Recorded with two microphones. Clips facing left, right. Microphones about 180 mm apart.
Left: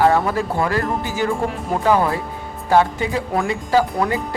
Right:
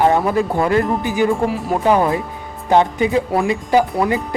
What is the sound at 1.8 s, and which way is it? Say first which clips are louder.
Speech: right 1 dB; 20° right (ahead or behind).